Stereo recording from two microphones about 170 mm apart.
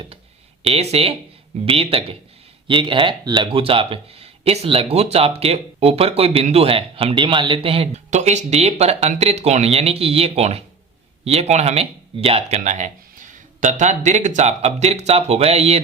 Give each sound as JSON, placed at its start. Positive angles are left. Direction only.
{"t": 0.6, "sound": "speech", "side_deg": -35}